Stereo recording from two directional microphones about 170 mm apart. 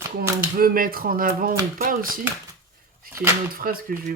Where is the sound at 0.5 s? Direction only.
60° right (ahead or behind).